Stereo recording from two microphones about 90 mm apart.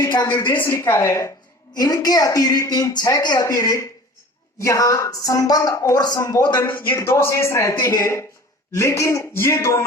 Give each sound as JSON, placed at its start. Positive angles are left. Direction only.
{"t": 0.3, "sound": "a man's voice", "side_deg": 25}
{"t": 1.7, "sound": "a woman's voice", "side_deg": 45}